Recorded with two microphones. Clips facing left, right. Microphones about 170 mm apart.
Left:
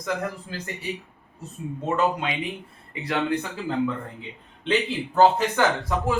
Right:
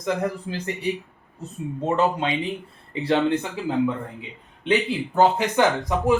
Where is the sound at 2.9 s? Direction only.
30° right (ahead or behind).